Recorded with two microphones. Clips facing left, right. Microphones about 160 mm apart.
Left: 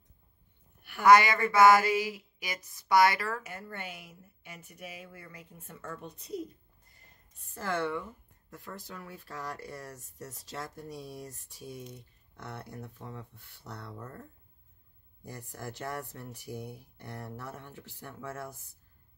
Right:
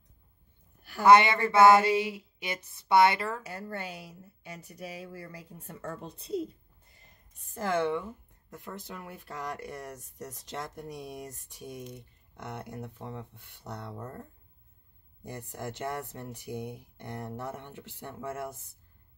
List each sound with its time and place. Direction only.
1.0 s a sound: 25° right (ahead or behind)
7.5 s speech: 15° right (ahead or behind)
15.2 s speech: 20° right (ahead or behind)